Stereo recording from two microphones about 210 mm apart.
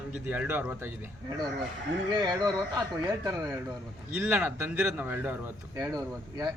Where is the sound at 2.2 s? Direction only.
20° right (ahead or behind).